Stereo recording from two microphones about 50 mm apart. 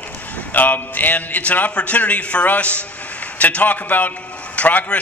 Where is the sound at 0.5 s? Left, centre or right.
Left.